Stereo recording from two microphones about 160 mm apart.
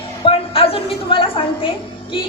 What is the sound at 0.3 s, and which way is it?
A woman's voice, 35° left (ahead or behind).